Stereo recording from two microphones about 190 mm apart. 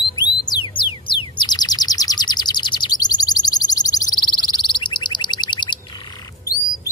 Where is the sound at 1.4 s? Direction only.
20° left (ahead or behind).